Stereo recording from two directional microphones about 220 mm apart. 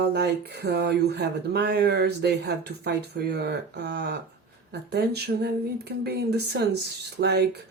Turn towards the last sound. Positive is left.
turn(degrees=-50)  # may be behind; listen again after turning